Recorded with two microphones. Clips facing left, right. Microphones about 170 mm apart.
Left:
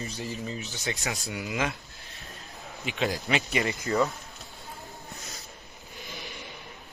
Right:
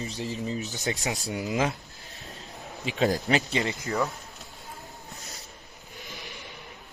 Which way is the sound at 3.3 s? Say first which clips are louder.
Right 2 dB; 30° right (ahead or behind).